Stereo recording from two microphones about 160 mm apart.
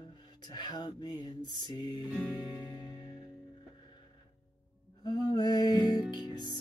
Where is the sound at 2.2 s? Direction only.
10° right (ahead or behind).